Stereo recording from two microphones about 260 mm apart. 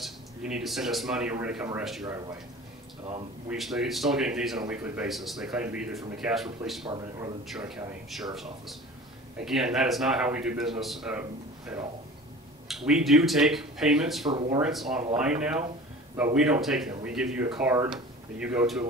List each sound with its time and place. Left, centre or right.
0.0 s speech: centre
3.4 s speech: centre
6.9 s a man's voice: centre
7.4 s speech: centre
9.4 s speech: centre
12.6 s speech: centre
14.3 s speech: centre
14.6 s speech: centre